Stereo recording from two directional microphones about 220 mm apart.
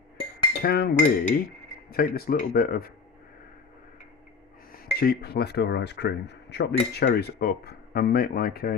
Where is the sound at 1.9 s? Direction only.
45° left (ahead or behind).